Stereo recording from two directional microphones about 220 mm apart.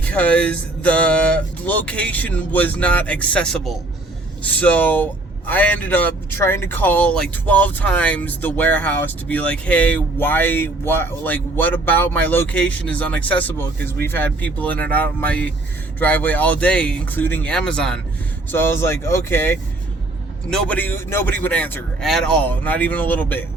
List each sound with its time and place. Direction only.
0.0 s speech: 5° left (ahead or behind)